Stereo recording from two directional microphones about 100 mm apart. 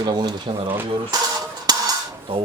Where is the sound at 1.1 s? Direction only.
40° right (ahead or behind).